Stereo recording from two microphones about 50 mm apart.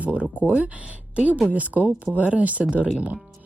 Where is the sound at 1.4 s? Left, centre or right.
Right.